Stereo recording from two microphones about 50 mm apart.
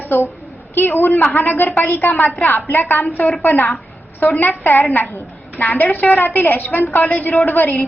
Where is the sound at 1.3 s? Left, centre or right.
Left.